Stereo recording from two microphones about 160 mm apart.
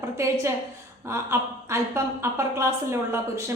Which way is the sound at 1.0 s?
15° right (ahead or behind).